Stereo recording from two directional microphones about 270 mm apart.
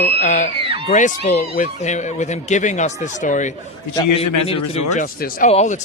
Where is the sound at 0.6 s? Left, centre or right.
Centre.